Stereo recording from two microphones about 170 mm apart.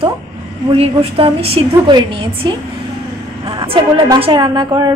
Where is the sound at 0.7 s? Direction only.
35° right (ahead or behind).